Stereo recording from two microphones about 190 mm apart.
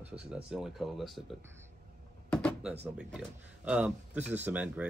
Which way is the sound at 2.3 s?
5° left (ahead or behind).